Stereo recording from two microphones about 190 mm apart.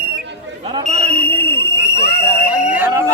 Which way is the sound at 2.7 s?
10° right (ahead or behind).